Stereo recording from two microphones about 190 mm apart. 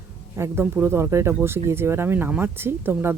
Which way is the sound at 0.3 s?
15° right (ahead or behind).